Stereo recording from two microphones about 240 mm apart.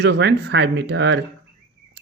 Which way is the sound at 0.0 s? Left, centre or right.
Right.